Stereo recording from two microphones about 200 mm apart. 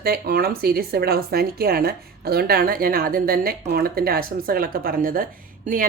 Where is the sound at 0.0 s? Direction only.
50° right (ahead or behind).